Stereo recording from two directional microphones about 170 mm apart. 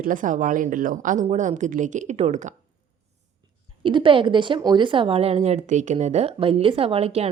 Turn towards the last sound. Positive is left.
turn(degrees=-35)  # may be behind; listen again after turning